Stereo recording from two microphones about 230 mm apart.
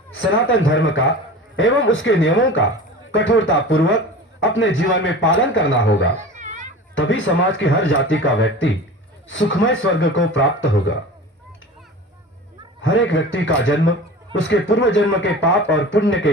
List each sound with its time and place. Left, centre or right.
0.1 s a man's voice: left
6.1 s a sound: right
6.9 s a man's voice: left
12.8 s a man's voice: left